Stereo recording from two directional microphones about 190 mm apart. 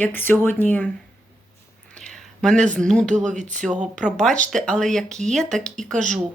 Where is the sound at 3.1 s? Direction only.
40° right (ahead or behind).